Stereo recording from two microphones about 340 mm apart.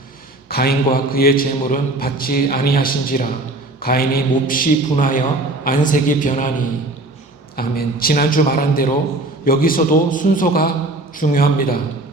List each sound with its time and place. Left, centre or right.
0.4 s a man's voice: left
7.5 s a man's voice: left